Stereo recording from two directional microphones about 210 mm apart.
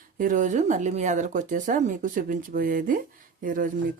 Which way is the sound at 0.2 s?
40° right (ahead or behind).